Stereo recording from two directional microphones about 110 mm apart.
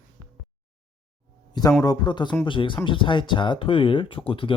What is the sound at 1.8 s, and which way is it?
Speech, 40° left (ahead or behind).